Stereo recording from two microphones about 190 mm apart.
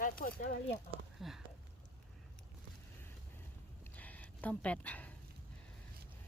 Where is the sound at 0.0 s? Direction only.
50° left (ahead or behind).